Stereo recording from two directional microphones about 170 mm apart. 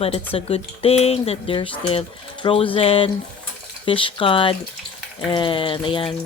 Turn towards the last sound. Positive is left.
turn(degrees=30)  # may be behind; listen again after turning